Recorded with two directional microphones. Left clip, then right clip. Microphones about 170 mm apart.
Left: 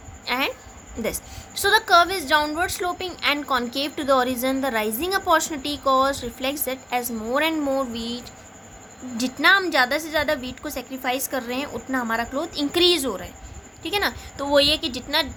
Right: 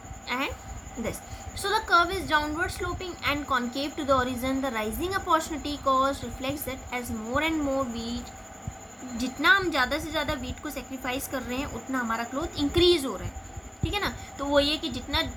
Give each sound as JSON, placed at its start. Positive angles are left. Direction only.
{"t": 0.3, "sound": "a woman's voice", "side_deg": 60}